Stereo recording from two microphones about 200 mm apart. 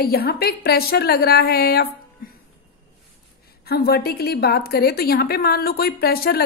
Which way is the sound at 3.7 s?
50° left (ahead or behind).